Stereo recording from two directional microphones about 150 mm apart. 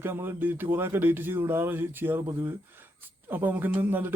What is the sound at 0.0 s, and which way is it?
A man's voice, 15° right (ahead or behind).